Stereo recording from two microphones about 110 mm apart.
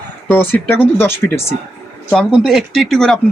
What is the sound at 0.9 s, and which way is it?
Speech, 20° left (ahead or behind).